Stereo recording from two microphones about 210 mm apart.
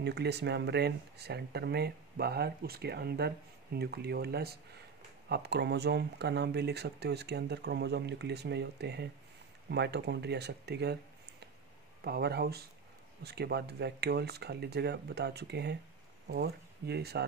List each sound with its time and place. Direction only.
0.0 s speech: 50° right (ahead or behind)